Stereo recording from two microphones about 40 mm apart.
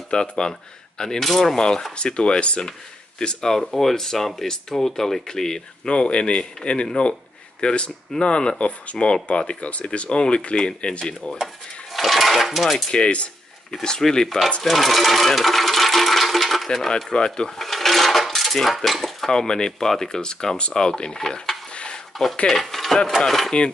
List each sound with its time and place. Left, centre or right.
0.1 s speech: centre
2.0 s speech: left
3.5 s speech: centre; by 11.3 s left
11.3 s speech: centre
12.9 s a sound: left
14.1 s speech: centre
14.6 s a sound: centre
16.6 s speech: centre
17.6 s coin: centre
18.9 s speech: centre
19.3 s speech: centre
22.1 s speech: centre